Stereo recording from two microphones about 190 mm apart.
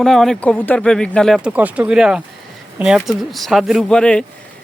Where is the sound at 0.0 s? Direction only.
Centre (ahead or behind).